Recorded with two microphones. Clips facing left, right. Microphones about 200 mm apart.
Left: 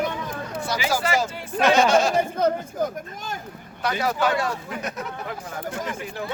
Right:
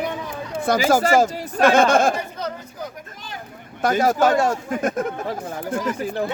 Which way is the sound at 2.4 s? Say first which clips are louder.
Left 8 dB; 50° left (ahead or behind).